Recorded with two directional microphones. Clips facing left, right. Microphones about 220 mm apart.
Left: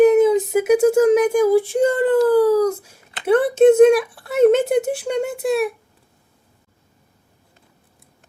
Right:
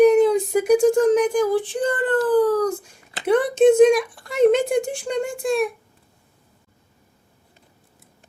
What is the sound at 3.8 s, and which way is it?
Speech, 5° left (ahead or behind).